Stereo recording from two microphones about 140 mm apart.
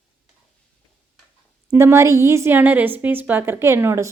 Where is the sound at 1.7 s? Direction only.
20° right (ahead or behind).